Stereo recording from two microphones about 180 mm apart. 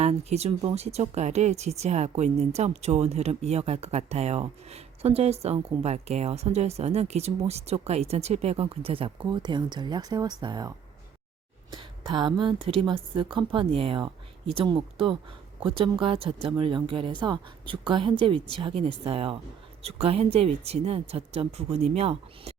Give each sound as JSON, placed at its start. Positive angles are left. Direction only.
{"t": 0.0, "sound": "speech", "side_deg": -35}
{"t": 11.7, "sound": "a sound", "side_deg": -25}
{"t": 12.6, "sound": "speech", "side_deg": -30}